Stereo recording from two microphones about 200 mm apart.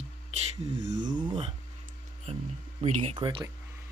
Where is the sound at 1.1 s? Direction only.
25° right (ahead or behind).